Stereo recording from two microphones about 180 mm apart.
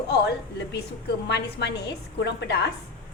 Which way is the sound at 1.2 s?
70° left (ahead or behind).